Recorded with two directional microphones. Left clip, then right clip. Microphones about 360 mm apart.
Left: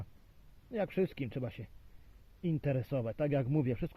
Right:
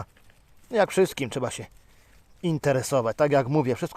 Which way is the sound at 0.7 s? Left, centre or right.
Centre.